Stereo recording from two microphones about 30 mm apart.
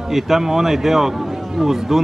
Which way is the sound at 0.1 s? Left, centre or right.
Centre.